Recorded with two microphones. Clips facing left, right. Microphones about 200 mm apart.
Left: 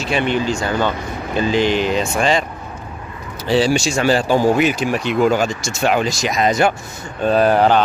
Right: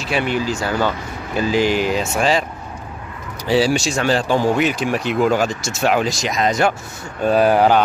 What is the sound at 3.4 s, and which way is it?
Speech, 10° right (ahead or behind).